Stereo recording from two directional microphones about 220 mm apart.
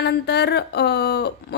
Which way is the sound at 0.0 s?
50° left (ahead or behind).